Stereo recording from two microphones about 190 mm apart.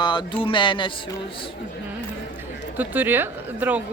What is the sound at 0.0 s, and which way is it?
Speech, 25° left (ahead or behind).